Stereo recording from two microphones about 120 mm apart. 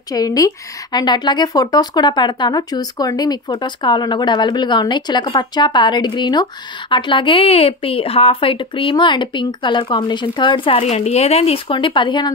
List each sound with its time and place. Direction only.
0.1 s a woman's voice: 30° left (ahead or behind)
10.8 s a woman's voice: 65° left (ahead or behind); by 12.3 s 40° left (ahead or behind)